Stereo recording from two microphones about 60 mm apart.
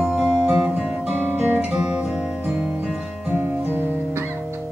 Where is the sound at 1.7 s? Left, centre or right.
Centre.